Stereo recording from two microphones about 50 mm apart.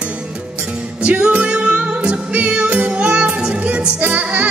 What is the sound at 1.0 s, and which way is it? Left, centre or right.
Music, right.